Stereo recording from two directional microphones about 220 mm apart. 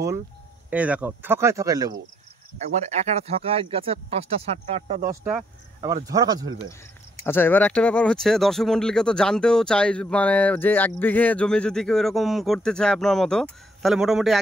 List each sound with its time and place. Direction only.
0.7 s speech: 5° right (ahead or behind)
2.7 s speech: 30° right (ahead or behind)
5.2 s speech: 15° right (ahead or behind)
7.2 s speech: 10° left (ahead or behind)